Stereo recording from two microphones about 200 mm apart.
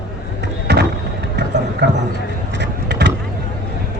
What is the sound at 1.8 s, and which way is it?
Speech, 55° right (ahead or behind).